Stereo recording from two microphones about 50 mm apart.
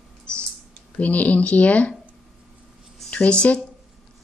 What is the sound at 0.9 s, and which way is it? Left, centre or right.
Speech, left.